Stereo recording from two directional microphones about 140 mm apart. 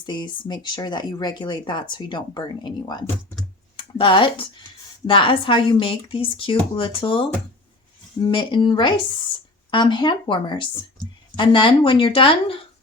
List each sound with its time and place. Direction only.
0.0 s speech: 35° left (ahead or behind)